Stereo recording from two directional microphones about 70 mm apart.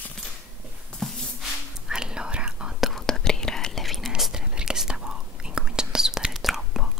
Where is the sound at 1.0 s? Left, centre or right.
Centre.